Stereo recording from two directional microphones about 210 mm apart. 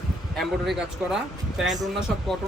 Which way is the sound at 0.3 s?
Centre (ahead or behind).